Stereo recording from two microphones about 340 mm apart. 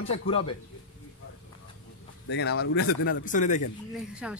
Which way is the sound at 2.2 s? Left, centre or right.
Left.